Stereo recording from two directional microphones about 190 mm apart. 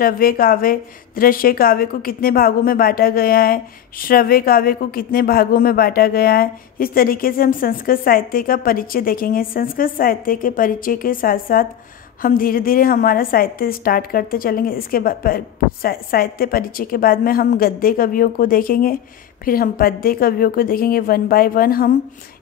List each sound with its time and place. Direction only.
0.0 s a woman's voice: 50° left (ahead or behind)